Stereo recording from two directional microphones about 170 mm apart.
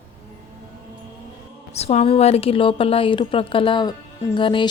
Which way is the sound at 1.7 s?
40° left (ahead or behind).